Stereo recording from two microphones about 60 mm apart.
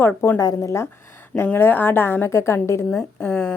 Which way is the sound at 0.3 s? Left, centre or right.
Left.